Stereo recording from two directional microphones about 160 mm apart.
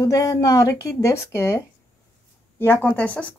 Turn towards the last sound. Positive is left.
turn(degrees=10)  # may be behind; listen again after turning